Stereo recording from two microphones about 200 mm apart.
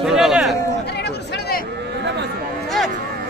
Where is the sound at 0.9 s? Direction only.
55° left (ahead or behind).